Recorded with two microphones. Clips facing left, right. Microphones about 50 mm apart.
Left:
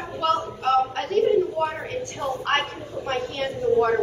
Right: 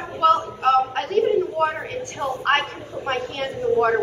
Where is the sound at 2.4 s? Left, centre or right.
Right.